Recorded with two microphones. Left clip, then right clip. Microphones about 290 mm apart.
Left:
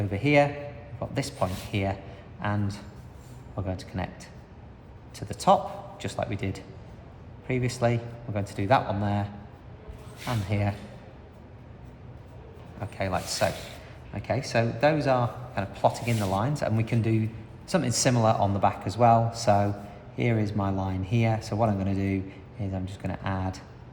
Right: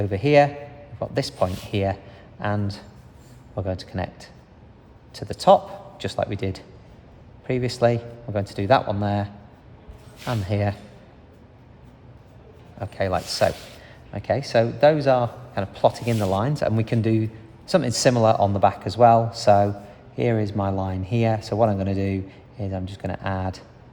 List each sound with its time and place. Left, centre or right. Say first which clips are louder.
0.0 s a man's voice: right 5 dB; right
12.8 s a man's voice: right 6 dB; right